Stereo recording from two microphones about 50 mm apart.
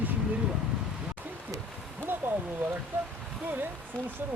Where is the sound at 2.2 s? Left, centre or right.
Right.